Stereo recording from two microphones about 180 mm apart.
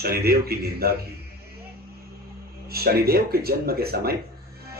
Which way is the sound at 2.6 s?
60° right (ahead or behind).